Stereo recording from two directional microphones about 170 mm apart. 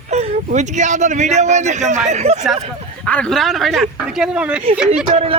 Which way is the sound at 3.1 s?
5° left (ahead or behind).